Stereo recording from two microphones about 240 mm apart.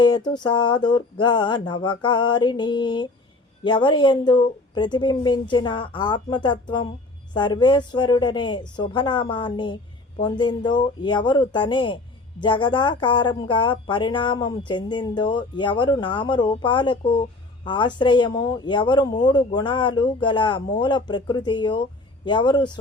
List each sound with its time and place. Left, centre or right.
0.3 s speech: centre